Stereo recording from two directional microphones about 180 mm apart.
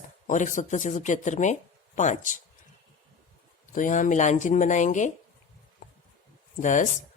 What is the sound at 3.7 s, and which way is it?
Speech, 45° left (ahead or behind).